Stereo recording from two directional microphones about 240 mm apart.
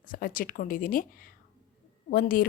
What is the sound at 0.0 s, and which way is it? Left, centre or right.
A woman's voice, left.